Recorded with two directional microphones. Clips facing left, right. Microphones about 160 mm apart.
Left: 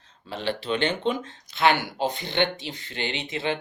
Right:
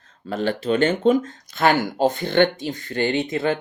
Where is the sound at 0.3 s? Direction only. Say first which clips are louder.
Right 6 dB; 45° right (ahead or behind).